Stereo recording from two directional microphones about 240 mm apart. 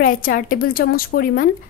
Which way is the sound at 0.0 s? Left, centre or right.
Left.